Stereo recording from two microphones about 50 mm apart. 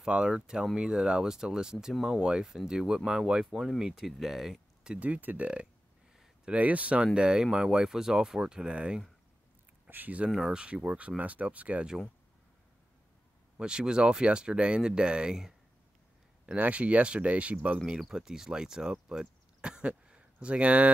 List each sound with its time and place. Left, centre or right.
0.0 s speech: centre
5.0 s speech: right
9.8 s speech: right
10.3 s speech: centre
10.6 s speech: right
13.6 s speech: centre
16.5 s speech: right
17.8 s speech: centre; by 20.9 s right